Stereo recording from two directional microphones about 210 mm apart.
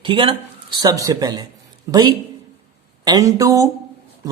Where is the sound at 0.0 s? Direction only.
25° right (ahead or behind).